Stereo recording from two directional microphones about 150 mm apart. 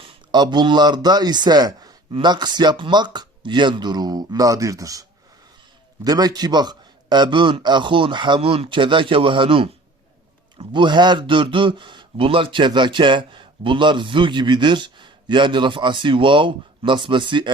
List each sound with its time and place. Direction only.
0.0 s speech: 30° right (ahead or behind)
6.1 s a man's voice: 25° right (ahead or behind)